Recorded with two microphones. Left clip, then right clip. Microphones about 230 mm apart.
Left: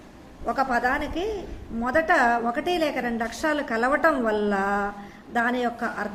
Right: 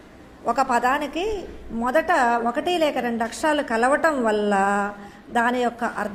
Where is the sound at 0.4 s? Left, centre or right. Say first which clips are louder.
Right 3 dB; right.